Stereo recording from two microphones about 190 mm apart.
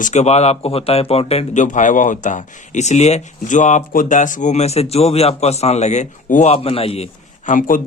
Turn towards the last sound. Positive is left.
turn(degrees=45)  # may be behind; listen again after turning